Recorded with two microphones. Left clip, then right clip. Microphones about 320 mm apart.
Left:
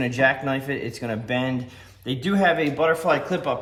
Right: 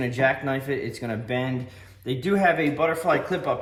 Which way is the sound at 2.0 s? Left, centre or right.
Centre.